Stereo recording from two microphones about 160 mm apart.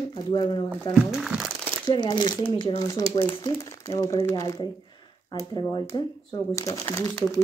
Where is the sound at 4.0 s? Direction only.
20° left (ahead or behind).